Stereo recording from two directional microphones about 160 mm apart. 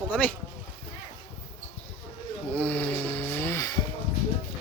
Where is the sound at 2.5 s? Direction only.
10° left (ahead or behind).